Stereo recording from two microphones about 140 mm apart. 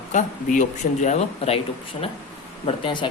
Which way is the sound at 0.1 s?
65° left (ahead or behind).